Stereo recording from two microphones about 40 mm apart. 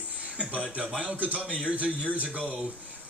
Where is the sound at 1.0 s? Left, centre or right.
Right.